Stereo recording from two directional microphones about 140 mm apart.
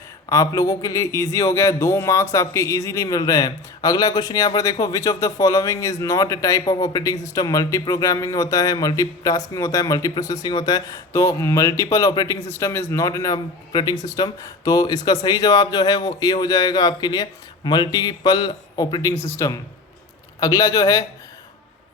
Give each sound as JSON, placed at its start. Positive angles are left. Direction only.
{"t": 0.3, "sound": "speech", "side_deg": 25}